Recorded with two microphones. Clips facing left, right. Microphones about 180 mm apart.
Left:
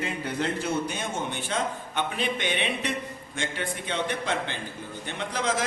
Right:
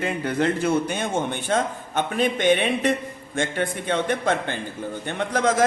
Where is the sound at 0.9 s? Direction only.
50° right (ahead or behind).